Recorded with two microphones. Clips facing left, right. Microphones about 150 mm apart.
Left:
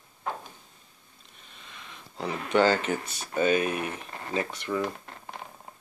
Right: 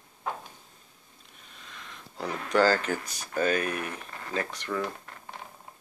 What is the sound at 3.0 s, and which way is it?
Speech, 25° left (ahead or behind).